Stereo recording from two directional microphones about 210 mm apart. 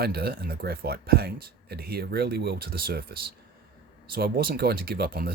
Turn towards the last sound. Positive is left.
turn(degrees=-45)  # may be behind; listen again after turning